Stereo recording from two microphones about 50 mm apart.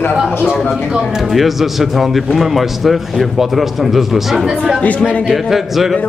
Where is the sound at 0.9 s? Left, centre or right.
Centre.